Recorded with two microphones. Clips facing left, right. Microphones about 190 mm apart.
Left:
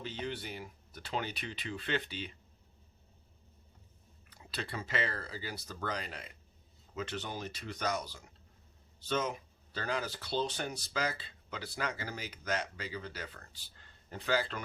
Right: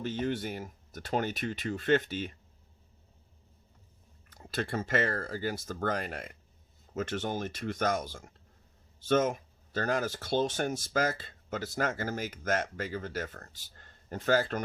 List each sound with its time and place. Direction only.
0.0 s speech: 50° right (ahead or behind)
4.3 s speech: 45° right (ahead or behind)